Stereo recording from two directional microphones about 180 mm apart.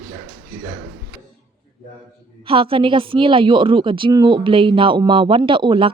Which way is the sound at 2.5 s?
30° right (ahead or behind).